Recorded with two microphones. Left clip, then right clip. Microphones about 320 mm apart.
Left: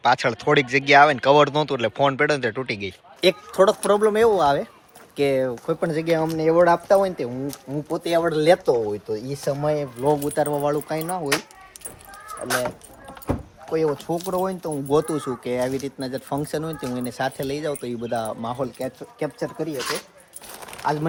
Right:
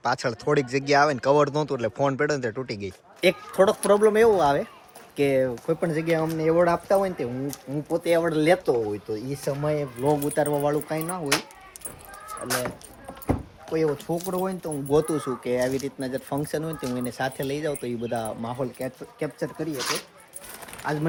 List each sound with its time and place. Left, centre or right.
0.0 s speech: centre
3.2 s speech: centre
12.5 s speech: centre
13.2 s a sound: centre
14.3 s speech: centre
19.7 s speech: centre
20.7 s a sound: centre